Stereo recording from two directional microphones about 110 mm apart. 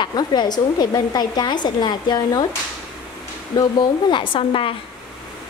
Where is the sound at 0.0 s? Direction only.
40° left (ahead or behind).